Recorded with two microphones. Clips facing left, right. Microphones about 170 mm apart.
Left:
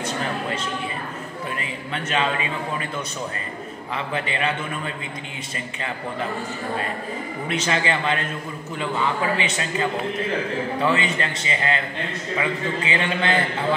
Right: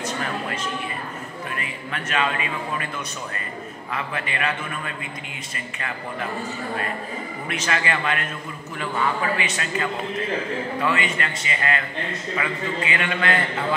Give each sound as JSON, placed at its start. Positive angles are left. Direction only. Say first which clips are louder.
{"t": 1.6, "sound": "a man's voice", "louder": "left 2 dB", "side_deg": 25}
{"t": 3.9, "sound": "a man's voice", "louder": "left 2 dB", "side_deg": 25}
{"t": 7.4, "sound": "a man's voice", "louder": "left 3 dB", "side_deg": 25}
{"t": 9.4, "sound": "a man's voice", "louder": "left 2 dB", "side_deg": 25}